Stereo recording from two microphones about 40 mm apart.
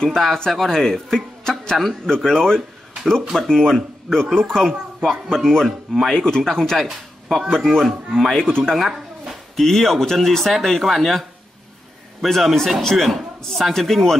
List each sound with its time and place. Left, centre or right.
0.1 s speech: centre
5.7 s speech: centre
6.1 s speech: centre
8.3 s speech: centre
8.7 s a sound: centre
9.6 s speech: centre